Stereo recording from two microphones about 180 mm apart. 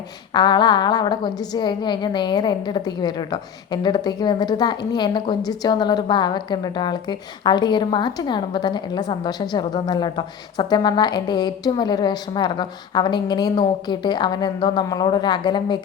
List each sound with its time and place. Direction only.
0.3 s a woman's voice: 25° left (ahead or behind)